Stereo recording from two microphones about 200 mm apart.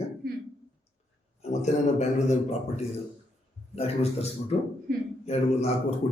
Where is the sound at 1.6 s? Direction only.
35° left (ahead or behind).